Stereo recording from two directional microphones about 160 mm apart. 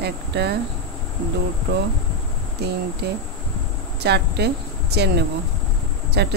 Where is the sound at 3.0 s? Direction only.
90° right.